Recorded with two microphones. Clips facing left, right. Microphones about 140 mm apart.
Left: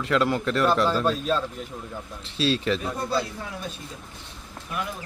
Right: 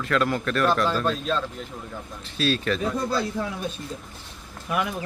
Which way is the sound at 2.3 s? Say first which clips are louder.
Left 1 dB; 25° left (ahead or behind).